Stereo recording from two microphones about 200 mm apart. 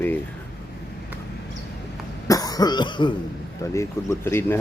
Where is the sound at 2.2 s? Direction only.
20° left (ahead or behind).